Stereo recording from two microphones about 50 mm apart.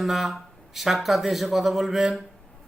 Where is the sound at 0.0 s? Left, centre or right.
Centre.